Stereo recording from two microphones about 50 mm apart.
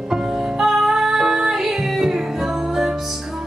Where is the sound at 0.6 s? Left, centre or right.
Centre.